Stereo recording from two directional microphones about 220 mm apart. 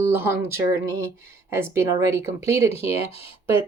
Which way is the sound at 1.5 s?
10° right (ahead or behind).